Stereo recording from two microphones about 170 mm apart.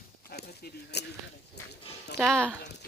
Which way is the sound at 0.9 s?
75° left (ahead or behind).